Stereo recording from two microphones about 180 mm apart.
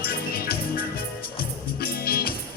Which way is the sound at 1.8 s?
55° left (ahead or behind).